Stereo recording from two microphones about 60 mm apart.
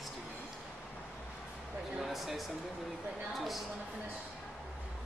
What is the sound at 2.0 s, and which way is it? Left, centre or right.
Speech, centre.